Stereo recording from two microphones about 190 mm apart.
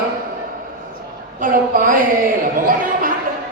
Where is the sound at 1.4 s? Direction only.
45° right (ahead or behind).